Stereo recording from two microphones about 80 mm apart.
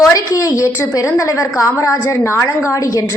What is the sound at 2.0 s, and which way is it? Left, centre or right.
A woman's voice, left.